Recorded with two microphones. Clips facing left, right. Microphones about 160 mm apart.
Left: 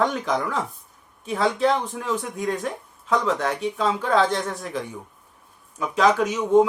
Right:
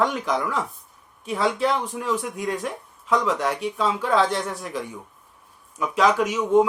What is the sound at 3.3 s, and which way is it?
Speech, 45° left (ahead or behind).